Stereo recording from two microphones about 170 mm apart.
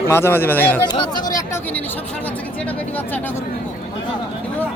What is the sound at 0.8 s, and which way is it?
Speech, 25° left (ahead or behind).